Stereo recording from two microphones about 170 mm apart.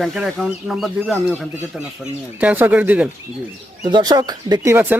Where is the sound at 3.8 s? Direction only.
25° right (ahead or behind).